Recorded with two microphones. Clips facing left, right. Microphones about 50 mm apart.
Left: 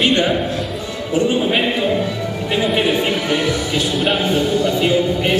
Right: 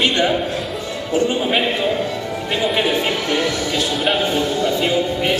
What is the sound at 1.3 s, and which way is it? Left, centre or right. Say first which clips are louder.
A man's voice: left 1 dB; centre.